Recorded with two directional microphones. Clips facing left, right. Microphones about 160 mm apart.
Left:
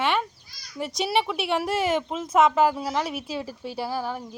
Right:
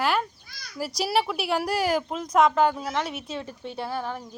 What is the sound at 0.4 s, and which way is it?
Children playing, 60° right (ahead or behind).